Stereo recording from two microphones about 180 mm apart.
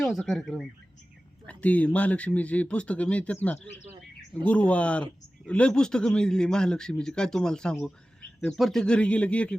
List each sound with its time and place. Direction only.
0.0 s a man's voice: centre (ahead or behind)